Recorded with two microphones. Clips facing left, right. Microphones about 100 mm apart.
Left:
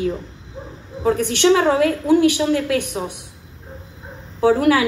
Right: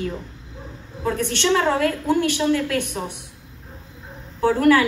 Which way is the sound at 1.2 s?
15° left (ahead or behind).